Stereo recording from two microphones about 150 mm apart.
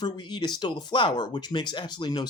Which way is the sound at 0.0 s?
30° left (ahead or behind).